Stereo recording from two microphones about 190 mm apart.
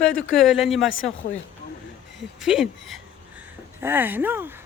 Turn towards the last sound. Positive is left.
turn(degrees=-10)  # may be behind; listen again after turning